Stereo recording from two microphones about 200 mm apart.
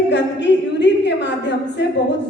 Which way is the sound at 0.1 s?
60° left (ahead or behind).